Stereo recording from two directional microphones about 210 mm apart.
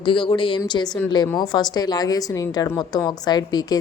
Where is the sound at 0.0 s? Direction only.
25° left (ahead or behind).